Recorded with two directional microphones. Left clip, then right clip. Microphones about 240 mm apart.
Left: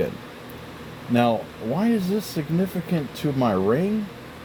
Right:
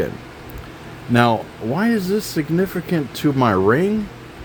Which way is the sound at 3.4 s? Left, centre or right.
Right.